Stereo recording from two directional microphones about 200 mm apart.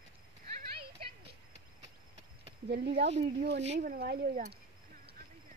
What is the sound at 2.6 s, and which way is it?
Speech, 55° right (ahead or behind).